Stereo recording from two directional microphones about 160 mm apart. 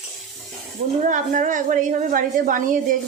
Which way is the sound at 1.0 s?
55° right (ahead or behind).